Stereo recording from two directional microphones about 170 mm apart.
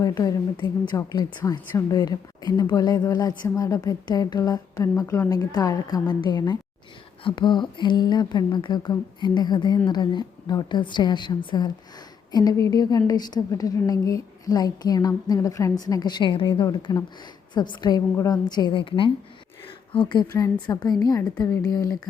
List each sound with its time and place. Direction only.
0.0 s a woman's voice: 25° left (ahead or behind)